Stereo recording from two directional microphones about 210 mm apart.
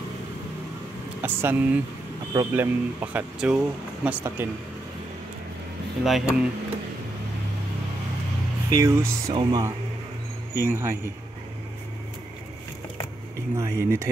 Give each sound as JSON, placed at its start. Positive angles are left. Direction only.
{"t": 1.2, "sound": "speech", "side_deg": -10}
{"t": 6.0, "sound": "speech", "side_deg": 0}
{"t": 8.7, "sound": "speech", "side_deg": -15}
{"t": 13.6, "sound": "speech", "side_deg": -15}